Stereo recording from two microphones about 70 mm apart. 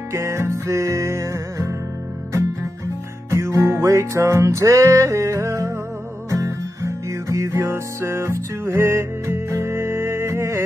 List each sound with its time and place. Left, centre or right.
0.1 s music: right
3.3 s music: right